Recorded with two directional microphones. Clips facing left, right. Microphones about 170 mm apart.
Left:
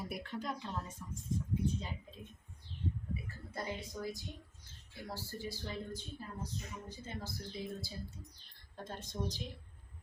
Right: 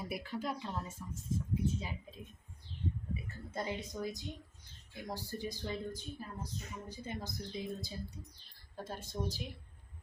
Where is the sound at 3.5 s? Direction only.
20° right (ahead or behind).